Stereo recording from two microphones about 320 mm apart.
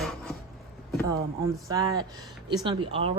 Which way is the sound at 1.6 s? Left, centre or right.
Centre.